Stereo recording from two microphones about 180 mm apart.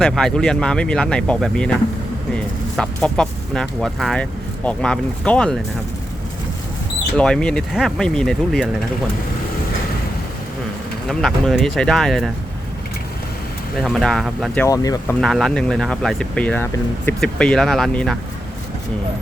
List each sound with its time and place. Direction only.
0.0 s speech: centre (ahead or behind)
7.2 s speech: 5° left (ahead or behind)
11.1 s speech: centre (ahead or behind)
13.7 s speech: centre (ahead or behind)
14.6 s speech: 20° left (ahead or behind)
15.2 s speech: centre (ahead or behind)